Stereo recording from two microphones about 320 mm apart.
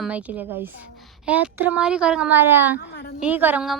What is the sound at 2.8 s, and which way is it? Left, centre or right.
Speech, left.